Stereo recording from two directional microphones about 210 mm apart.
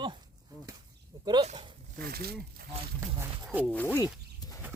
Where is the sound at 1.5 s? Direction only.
25° right (ahead or behind).